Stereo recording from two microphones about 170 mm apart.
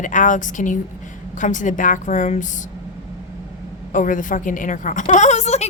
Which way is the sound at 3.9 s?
50° left (ahead or behind).